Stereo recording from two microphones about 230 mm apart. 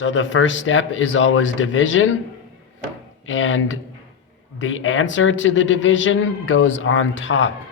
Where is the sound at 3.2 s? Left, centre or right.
Left.